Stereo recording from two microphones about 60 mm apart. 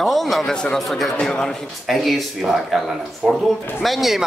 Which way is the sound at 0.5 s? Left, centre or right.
Centre.